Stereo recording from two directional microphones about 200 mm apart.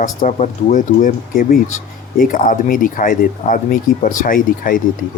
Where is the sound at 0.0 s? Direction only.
40° left (ahead or behind).